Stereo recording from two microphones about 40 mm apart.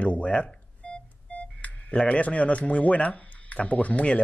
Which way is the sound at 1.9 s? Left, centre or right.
Left.